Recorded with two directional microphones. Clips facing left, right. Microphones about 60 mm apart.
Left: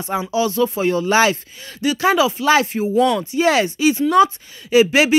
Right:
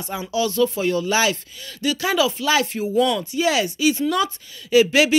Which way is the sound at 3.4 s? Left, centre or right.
Left.